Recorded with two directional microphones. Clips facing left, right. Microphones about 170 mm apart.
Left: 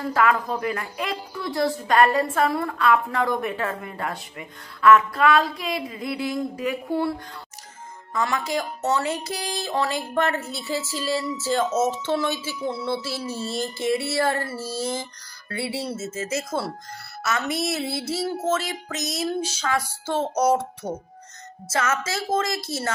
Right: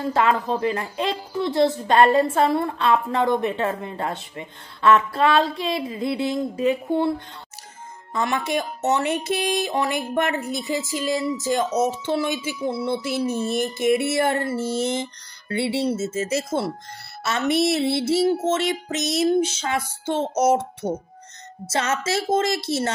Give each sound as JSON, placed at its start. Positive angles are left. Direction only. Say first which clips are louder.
{"t": 0.0, "sound": "a woman's voice", "louder": "right 1 dB", "side_deg": -25}